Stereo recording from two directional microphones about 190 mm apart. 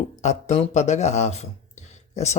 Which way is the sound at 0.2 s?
35° left (ahead or behind).